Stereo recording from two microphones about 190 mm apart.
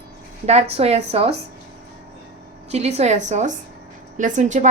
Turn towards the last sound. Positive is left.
turn(degrees=-40)  # may be behind; listen again after turning